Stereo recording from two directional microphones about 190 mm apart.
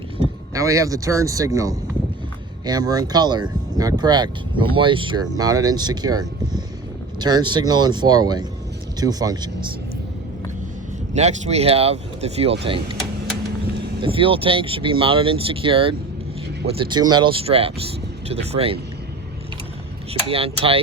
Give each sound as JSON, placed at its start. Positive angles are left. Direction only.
{"t": 0.5, "sound": "speech", "side_deg": -15}
{"t": 11.1, "sound": "speech", "side_deg": -35}
{"t": 14.0, "sound": "speech", "side_deg": -30}
{"t": 20.2, "sound": "speech", "side_deg": -30}